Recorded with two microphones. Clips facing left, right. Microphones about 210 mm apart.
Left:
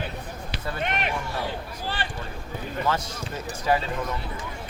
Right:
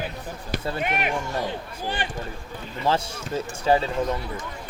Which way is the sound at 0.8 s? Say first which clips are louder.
Even; 5° right (ahead or behind).